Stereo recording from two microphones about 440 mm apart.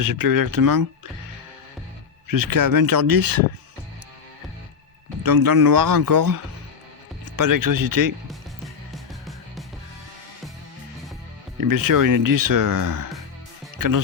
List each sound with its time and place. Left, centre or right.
0.0 s speech: right
2.2 s speech: right
5.2 s speech: right
11.6 s speech: right